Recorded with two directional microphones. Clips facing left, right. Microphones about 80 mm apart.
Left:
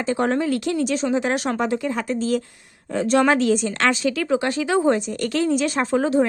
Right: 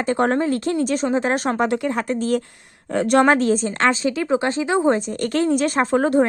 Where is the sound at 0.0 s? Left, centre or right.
Right.